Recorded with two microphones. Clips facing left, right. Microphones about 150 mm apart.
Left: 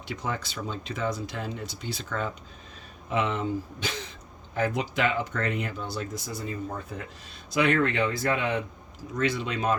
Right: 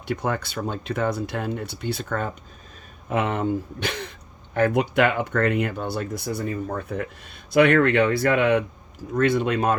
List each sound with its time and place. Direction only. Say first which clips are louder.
0.0 s speech: right 7 dB; 55° right (ahead or behind)